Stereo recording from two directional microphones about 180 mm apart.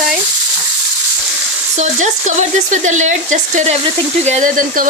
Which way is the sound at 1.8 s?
40° right (ahead or behind).